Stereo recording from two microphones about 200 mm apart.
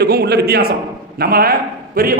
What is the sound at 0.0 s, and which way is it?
A man's voice, 55° right (ahead or behind).